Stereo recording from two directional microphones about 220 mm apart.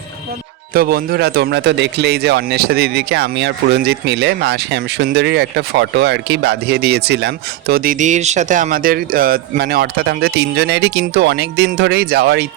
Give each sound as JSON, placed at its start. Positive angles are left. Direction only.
{"t": 0.7, "sound": "speech", "side_deg": -45}